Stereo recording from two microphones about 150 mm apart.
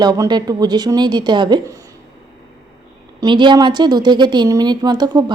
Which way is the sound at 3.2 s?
30° right (ahead or behind).